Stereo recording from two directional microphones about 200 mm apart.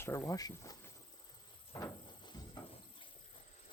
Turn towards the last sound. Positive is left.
turn(degrees=25)  # may be behind; listen again after turning